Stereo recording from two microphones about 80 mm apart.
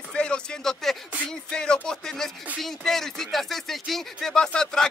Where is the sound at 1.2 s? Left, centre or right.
Centre.